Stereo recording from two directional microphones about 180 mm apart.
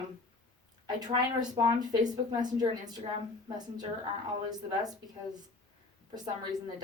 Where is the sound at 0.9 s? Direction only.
20° right (ahead or behind).